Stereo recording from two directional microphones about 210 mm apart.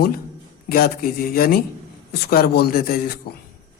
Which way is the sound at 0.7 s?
45° left (ahead or behind).